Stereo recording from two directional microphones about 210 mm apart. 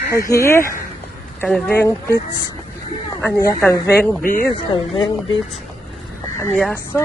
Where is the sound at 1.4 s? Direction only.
5° left (ahead or behind).